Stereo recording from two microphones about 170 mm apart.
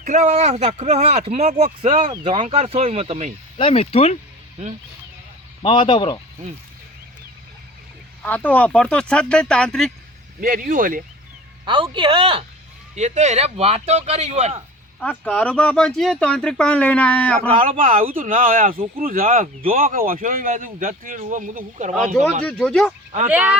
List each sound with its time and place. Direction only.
0.0 s speech: 45° right (ahead or behind)
3.6 s speech: 35° left (ahead or behind)
5.6 s speech: 30° left (ahead or behind)
8.2 s speech: 10° left (ahead or behind)
10.4 s speech: 55° right (ahead or behind)
11.6 s speech: 30° right (ahead or behind)
15.2 s speech: 5° left (ahead or behind)
17.6 s speech: 55° right (ahead or behind)
22.4 s speech: 5° left (ahead or behind)
23.3 s speech: 10° right (ahead or behind)